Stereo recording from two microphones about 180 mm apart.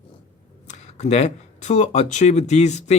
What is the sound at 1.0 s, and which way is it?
Speech, 40° left (ahead or behind).